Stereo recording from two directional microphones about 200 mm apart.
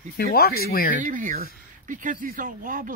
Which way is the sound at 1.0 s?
40° right (ahead or behind).